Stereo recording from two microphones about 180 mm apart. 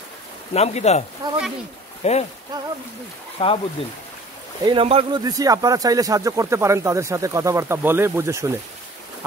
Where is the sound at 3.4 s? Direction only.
30° left (ahead or behind).